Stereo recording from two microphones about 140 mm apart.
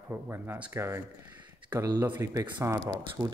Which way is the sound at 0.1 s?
15° right (ahead or behind).